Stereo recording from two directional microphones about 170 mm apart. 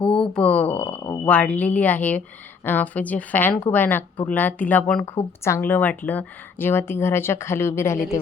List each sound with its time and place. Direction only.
0.0 s a sound: 5° left (ahead or behind)
1.0 s speech: 25° left (ahead or behind)
1.3 s speech: 5° left (ahead or behind)